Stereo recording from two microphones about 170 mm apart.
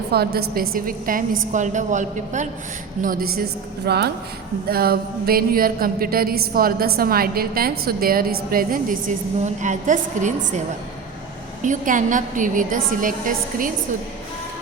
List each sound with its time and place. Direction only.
0.1 s mantra: 70° right (ahead or behind); by 2.5 s 45° right (ahead or behind)
3.0 s mantra: 55° right (ahead or behind)
3.8 s speech: 75° right (ahead or behind)
4.7 s mantra: 65° right (ahead or behind)
11.6 s a woman's voice: 50° right (ahead or behind)